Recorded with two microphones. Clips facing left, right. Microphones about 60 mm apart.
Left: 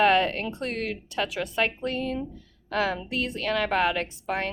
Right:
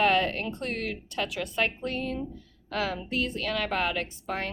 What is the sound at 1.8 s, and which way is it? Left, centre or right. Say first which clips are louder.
A woman's voice: left 3 dB; left.